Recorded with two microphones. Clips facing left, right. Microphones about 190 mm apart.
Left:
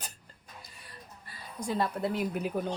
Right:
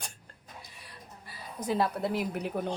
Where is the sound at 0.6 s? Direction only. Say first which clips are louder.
Right 1 dB; centre (ahead or behind).